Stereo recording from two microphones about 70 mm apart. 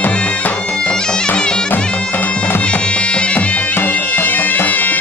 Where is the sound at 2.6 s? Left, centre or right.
Centre.